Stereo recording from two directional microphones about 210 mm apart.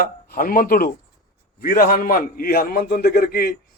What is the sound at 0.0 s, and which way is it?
A man's voice, 40° left (ahead or behind).